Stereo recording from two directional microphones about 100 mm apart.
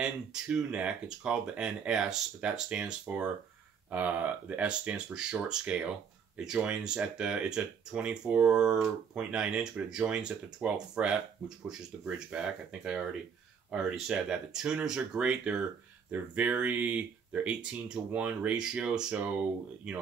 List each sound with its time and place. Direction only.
0.0 s speech: 10° right (ahead or behind)